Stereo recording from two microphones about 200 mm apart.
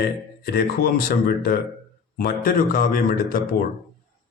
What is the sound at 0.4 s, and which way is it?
Speech, 50° left (ahead or behind).